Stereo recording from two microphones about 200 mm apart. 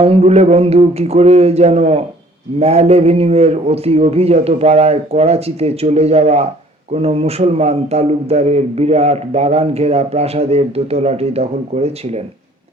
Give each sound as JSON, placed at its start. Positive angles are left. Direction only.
{"t": 0.0, "sound": "speech", "side_deg": -30}